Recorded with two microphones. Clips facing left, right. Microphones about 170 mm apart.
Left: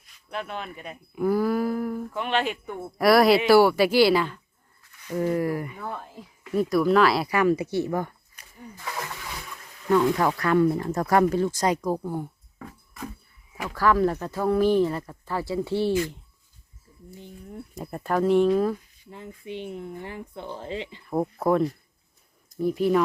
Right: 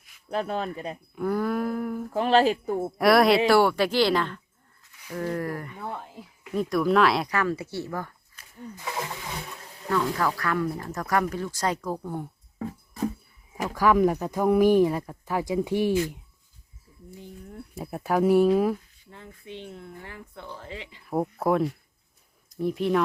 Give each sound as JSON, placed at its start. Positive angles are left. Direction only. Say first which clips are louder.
{"t": 0.3, "sound": "a man's voice", "louder": "right 5 dB", "side_deg": -35}
{"t": 1.1, "sound": "a sound", "louder": "left 3 dB", "side_deg": 5}
{"t": 2.1, "sound": "a man's voice", "louder": "right 8 dB", "side_deg": -35}
{"t": 3.0, "sound": "speech", "louder": "left 1 dB", "side_deg": 0}
{"t": 7.3, "sound": "speech", "louder": "left 6 dB", "side_deg": 15}
{"t": 8.8, "sound": "a sound", "louder": "right 1 dB", "side_deg": -25}
{"t": 9.9, "sound": "speech", "louder": "left 5 dB", "side_deg": 20}
{"t": 12.5, "sound": "music", "louder": "right 9 dB", "side_deg": -35}
{"t": 13.7, "sound": "speech", "louder": "right 1 dB", "side_deg": -15}
{"t": 17.7, "sound": "speech", "louder": "right 1 dB", "side_deg": -5}
{"t": 19.1, "sound": "speech", "louder": "left 5 dB", "side_deg": 15}
{"t": 21.0, "sound": "speech", "louder": "even", "side_deg": -5}